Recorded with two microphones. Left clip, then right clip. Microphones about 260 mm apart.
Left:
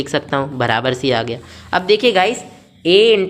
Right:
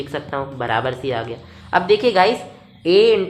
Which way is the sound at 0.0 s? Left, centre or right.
Left.